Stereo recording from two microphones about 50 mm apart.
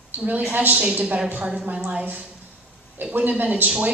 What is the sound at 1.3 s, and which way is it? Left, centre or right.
A woman's voice, right.